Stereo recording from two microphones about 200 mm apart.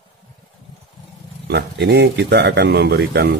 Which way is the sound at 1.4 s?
55° right (ahead or behind).